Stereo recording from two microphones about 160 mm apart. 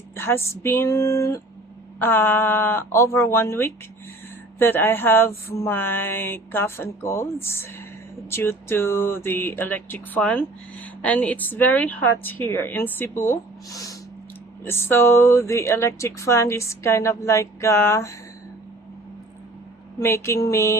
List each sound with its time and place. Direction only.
0.2 s music: 15° left (ahead or behind)
20.0 s music: 15° left (ahead or behind)